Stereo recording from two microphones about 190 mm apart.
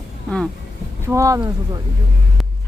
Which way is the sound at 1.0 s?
15° right (ahead or behind).